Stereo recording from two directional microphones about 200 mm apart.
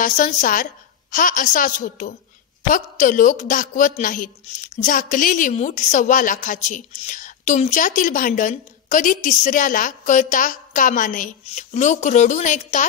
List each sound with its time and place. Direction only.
0.0 s a woman's voice: 40° left (ahead or behind)